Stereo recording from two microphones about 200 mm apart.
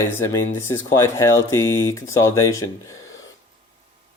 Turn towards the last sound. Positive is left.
turn(degrees=15)  # may be behind; listen again after turning